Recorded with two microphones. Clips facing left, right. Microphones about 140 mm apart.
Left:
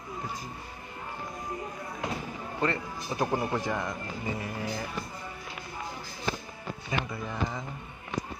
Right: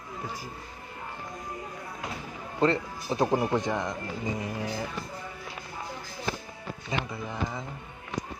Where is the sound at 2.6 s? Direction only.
25° right (ahead or behind).